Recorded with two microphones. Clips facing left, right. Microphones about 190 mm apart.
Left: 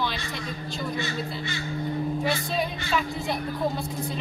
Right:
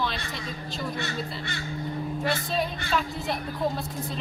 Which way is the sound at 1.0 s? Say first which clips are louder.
Left 2 dB; 60° right (ahead or behind).